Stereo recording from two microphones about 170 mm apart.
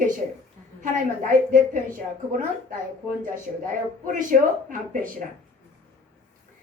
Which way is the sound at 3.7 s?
50° right (ahead or behind).